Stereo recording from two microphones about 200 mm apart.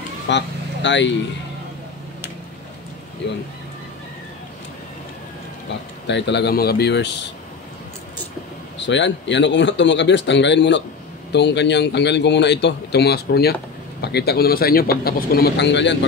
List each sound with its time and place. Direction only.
0.3 s a man's voice: 65° left (ahead or behind)
6.0 s a man's voice: 60° left (ahead or behind)
8.7 s a man's voice: 65° left (ahead or behind)